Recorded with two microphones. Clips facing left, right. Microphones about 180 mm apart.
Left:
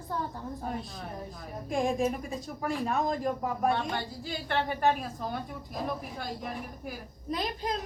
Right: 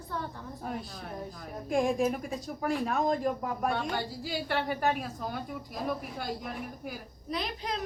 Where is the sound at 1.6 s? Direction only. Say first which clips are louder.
Right 1 dB; centre (ahead or behind).